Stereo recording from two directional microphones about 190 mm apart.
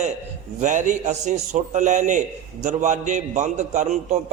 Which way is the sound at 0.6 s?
40° right (ahead or behind).